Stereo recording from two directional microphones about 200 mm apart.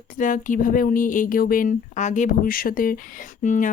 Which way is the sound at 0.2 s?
40° left (ahead or behind).